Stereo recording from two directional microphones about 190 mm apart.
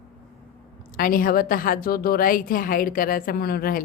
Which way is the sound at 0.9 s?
50° left (ahead or behind).